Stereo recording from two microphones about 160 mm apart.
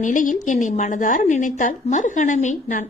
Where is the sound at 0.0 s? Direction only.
55° left (ahead or behind).